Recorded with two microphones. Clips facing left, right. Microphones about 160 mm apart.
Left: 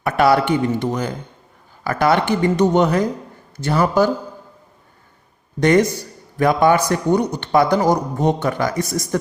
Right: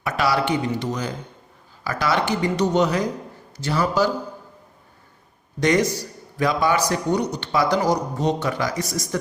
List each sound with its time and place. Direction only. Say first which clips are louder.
0.0 s a man's voice: left 6 dB; 55° left (ahead or behind)
5.5 s a man's voice: left 5 dB; 55° left (ahead or behind)